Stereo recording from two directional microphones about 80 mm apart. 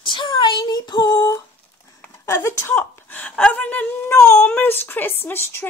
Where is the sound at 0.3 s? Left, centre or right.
Left.